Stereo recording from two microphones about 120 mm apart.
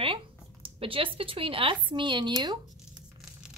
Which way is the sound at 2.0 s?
40° right (ahead or behind).